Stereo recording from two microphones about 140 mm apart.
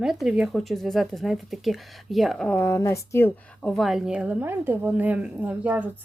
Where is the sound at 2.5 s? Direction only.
20° left (ahead or behind).